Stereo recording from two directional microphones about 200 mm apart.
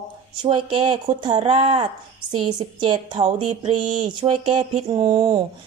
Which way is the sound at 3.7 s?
20° right (ahead or behind).